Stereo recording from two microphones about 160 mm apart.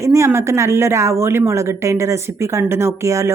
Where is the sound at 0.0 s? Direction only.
20° right (ahead or behind).